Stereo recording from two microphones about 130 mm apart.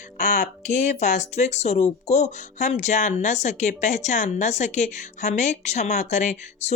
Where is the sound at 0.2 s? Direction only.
70° left (ahead or behind).